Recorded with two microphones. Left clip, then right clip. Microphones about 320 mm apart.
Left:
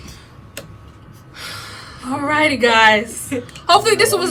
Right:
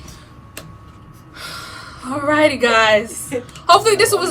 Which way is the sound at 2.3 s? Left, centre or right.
Centre.